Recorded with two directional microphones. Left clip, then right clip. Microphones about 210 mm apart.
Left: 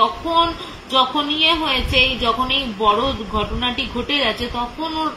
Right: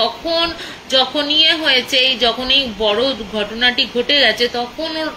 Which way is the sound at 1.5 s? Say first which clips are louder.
Right 4 dB; 10° left (ahead or behind).